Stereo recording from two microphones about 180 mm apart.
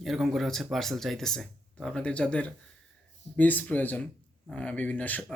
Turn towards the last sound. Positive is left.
turn(degrees=10)  # may be behind; listen again after turning